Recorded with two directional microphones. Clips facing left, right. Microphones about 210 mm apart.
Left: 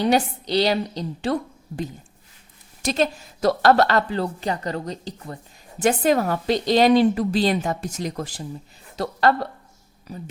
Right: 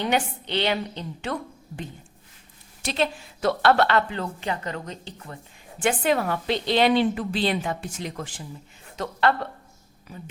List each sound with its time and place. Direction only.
0.0 s a woman's voice: 35° left (ahead or behind)